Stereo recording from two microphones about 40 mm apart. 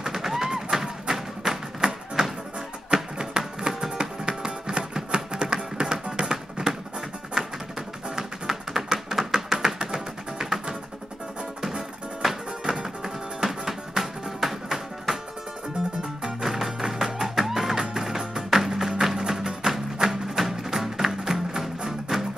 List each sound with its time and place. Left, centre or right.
0.0 s music: centre
2.9 s music: right
7.4 s music: centre
8.2 s tap: centre
9.3 s a sound: centre
9.9 s music: centre
11.6 s music: centre